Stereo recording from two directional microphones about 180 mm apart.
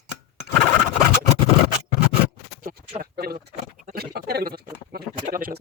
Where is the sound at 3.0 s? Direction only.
60° right (ahead or behind).